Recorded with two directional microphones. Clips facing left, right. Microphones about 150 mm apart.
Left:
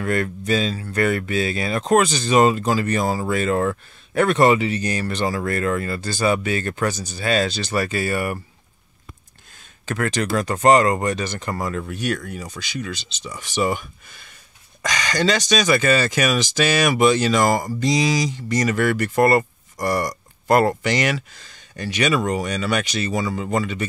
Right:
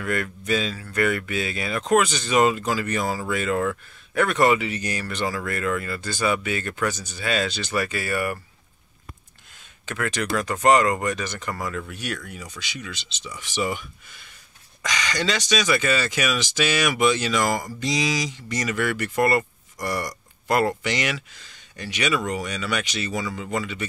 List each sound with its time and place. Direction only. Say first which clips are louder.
0.0 s speech: left 5 dB; 35° left (ahead or behind)
9.8 s speech: left 4 dB; 35° left (ahead or behind)